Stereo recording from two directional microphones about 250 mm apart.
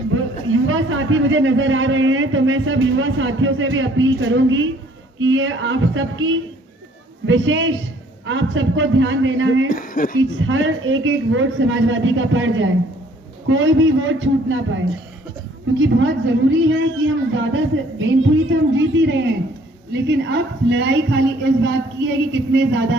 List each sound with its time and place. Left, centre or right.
0.4 s a man's voice: right
9.6 s speech: left
10.2 s a man's voice: right
18.7 s a man's voice: right